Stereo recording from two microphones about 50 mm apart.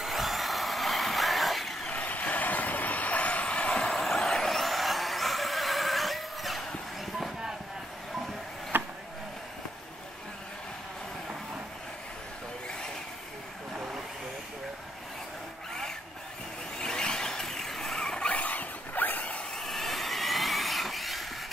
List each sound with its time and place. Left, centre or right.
0.0 s vehicle: centre
1.9 s vehicle: left; by 6.6 s centre
8.7 s a sound: right
16.7 s vehicle: centre
18.3 s zipper: left
19.5 s vehicle: centre